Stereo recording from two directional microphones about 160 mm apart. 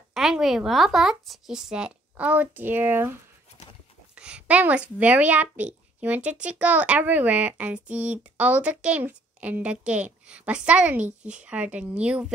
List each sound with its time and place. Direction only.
0.1 s speech: centre (ahead or behind)